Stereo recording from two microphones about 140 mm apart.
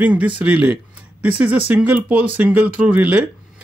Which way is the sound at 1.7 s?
10° right (ahead or behind).